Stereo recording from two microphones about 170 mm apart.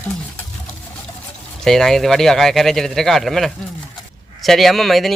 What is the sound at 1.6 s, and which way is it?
Speech, centre (ahead or behind).